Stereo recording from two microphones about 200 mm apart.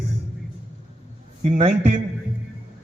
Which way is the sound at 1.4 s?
35° right (ahead or behind).